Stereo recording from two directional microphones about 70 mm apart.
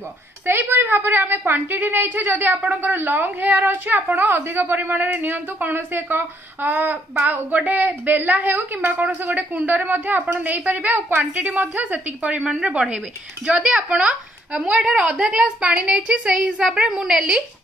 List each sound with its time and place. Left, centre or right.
0.5 s a woman's voice: right
4.4 s speech: right
4.7 s a woman's voice: right; by 17.4 s centre